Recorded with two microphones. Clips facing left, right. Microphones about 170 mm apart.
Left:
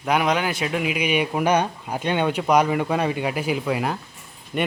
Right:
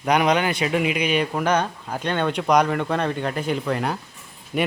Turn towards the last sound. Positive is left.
turn(degrees=-5)  # may be behind; listen again after turning